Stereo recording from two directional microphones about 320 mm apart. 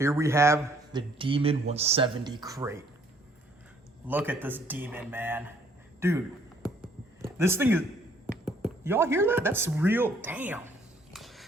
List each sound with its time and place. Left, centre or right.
0.0 s speech: centre
4.0 s speech: centre
7.2 s speech: centre
11.1 s a sound: centre